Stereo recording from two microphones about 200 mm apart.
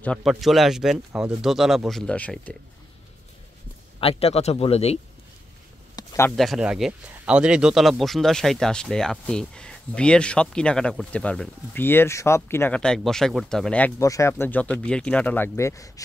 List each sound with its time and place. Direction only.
0.0 s speech: 5° left (ahead or behind)
4.0 s speech: 30° left (ahead or behind)
5.9 s a sound: 15° left (ahead or behind)
6.3 s speech: centre (ahead or behind)